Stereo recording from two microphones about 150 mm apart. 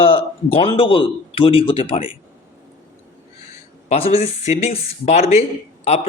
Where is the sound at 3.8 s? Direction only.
40° left (ahead or behind).